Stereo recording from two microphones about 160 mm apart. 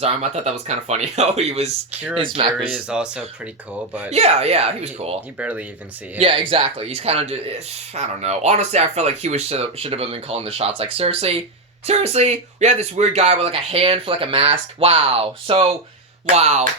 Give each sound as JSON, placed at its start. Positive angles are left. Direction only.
{"t": 0.0, "sound": "speech", "side_deg": -40}
{"t": 2.6, "sound": "speech", "side_deg": -5}
{"t": 4.1, "sound": "speech", "side_deg": -40}
{"t": 5.4, "sound": "speech", "side_deg": -10}
{"t": 6.1, "sound": "speech", "side_deg": -35}